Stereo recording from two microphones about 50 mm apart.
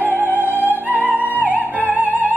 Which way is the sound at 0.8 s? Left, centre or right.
Right.